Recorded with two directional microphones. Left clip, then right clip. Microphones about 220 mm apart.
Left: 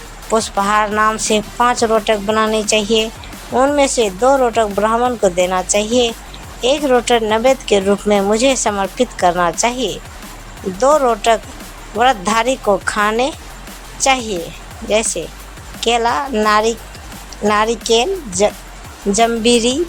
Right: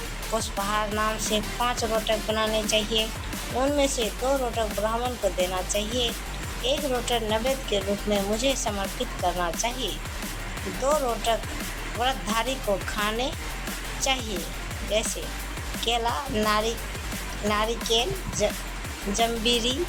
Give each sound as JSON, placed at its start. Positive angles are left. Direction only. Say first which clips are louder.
{"t": 0.3, "sound": "speech", "louder": "left 13 dB", "side_deg": 40}